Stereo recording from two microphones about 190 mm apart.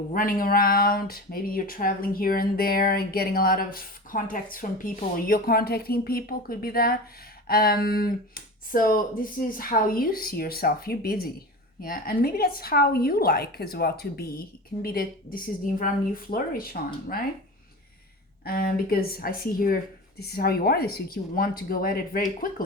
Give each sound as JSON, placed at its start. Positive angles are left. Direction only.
{"t": 0.1, "sound": "speech", "side_deg": 45}
{"t": 18.4, "sound": "speech", "side_deg": 50}